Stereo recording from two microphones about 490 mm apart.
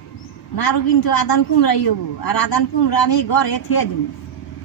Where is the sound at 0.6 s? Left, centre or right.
Left.